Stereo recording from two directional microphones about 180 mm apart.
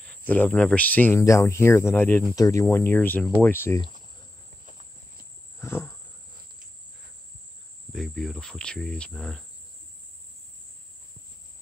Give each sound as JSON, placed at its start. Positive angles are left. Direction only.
{"t": 0.0, "sound": "speech", "side_deg": 10}
{"t": 4.6, "sound": "cricket", "side_deg": -45}
{"t": 5.6, "sound": "wild animals", "side_deg": 15}
{"t": 7.9, "sound": "speech", "side_deg": 0}